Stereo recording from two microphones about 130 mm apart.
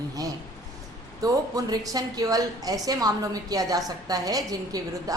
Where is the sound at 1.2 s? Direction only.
30° right (ahead or behind).